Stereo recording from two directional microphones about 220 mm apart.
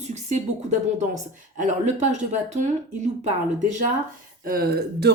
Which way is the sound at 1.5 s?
35° right (ahead or behind).